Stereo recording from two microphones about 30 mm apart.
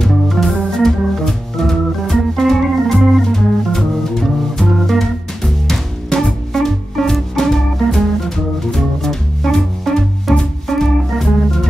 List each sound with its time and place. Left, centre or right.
0.1 s organ: centre
3.3 s music: centre
6.5 s music: centre